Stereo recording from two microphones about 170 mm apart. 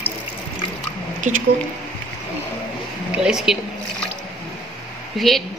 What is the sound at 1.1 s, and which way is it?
Speech, 50° right (ahead or behind).